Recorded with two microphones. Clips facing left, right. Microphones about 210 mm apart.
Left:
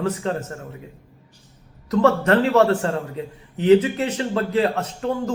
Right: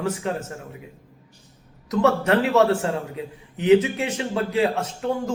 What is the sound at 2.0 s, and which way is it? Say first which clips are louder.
A man's voice: left 2 dB; 10° right (ahead or behind).